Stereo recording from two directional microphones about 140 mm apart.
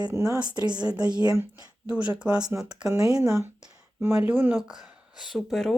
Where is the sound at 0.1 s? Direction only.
20° right (ahead or behind).